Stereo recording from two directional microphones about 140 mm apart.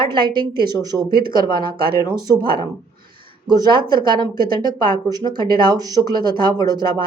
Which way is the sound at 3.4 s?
30° right (ahead or behind).